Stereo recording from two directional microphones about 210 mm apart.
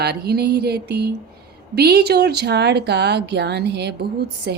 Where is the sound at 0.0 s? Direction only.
50° right (ahead or behind).